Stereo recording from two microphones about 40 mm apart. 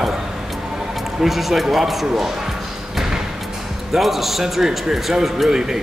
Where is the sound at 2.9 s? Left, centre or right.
Centre.